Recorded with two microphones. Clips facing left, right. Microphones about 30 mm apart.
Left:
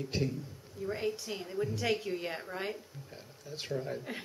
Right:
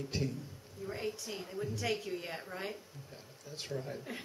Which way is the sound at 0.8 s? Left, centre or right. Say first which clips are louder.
Left 5 dB; centre.